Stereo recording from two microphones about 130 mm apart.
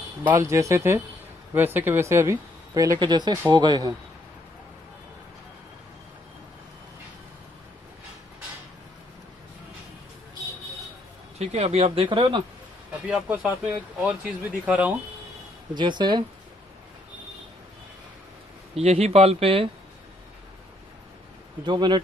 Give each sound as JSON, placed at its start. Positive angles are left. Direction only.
{"t": 0.2, "sound": "speech", "side_deg": -15}
{"t": 11.3, "sound": "speech", "side_deg": -55}
{"t": 13.0, "sound": "speech", "side_deg": -10}
{"t": 15.7, "sound": "speech", "side_deg": -35}
{"t": 18.8, "sound": "speech", "side_deg": -55}
{"t": 21.6, "sound": "speech", "side_deg": -35}